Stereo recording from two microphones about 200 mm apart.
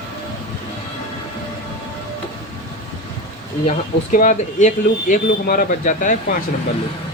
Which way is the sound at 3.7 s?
40° left (ahead or behind).